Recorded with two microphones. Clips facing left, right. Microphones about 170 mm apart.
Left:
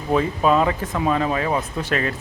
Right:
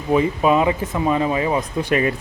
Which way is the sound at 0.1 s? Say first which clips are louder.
Right 2 dB; 10° right (ahead or behind).